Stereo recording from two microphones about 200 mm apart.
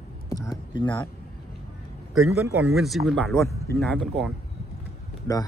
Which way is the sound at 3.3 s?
15° left (ahead or behind).